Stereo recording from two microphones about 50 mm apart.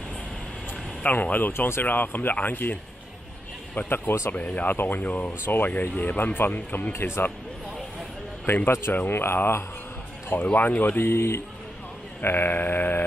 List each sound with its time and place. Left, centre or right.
1.0 s speech: left
8.5 s speech: left
10.3 s speech: left
11.1 s speech: left
12.2 s speech: left